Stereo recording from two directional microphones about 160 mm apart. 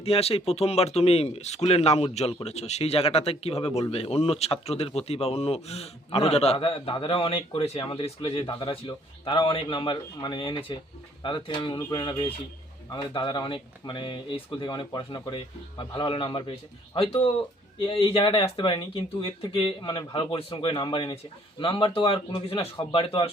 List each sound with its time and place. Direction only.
0.0 s speech: 40° left (ahead or behind)